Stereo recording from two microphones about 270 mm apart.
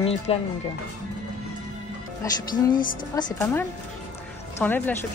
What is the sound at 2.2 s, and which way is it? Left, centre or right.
Speech, centre.